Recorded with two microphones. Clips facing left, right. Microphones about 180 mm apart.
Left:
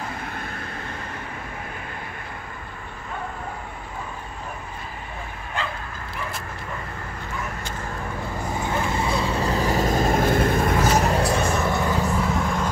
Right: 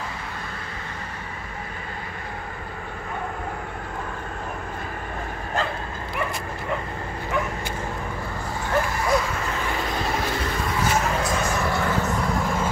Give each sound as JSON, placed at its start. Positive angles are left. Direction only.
{"t": 5.6, "sound": "bow-wow", "side_deg": -45}
{"t": 8.6, "sound": "vehicle", "side_deg": 25}